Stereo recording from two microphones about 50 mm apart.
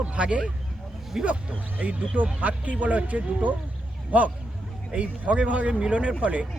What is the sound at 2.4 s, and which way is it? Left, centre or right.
Speech, right.